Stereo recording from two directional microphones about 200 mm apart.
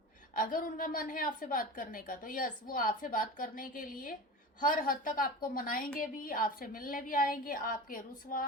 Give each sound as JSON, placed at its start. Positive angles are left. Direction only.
{"t": 0.3, "sound": "a woman's voice", "side_deg": 45}